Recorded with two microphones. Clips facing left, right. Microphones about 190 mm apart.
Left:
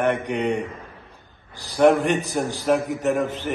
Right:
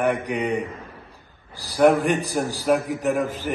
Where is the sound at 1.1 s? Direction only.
35° right (ahead or behind).